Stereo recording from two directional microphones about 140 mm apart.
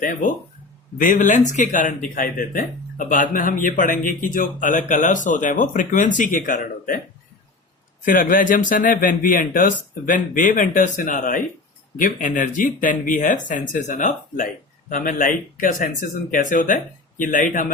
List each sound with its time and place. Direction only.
0.0 s speech: 75° left (ahead or behind)
8.0 s speech: 75° left (ahead or behind)